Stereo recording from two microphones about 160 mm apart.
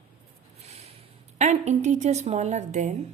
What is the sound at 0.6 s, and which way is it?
Speech, 40° right (ahead or behind).